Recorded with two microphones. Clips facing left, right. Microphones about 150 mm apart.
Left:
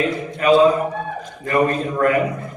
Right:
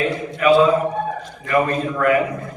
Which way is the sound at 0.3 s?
35° left (ahead or behind).